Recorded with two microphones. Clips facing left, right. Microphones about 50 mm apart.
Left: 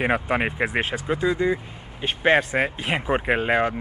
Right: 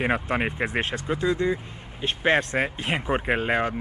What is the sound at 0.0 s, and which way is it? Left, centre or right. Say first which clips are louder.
A man's voice: left 2 dB; centre.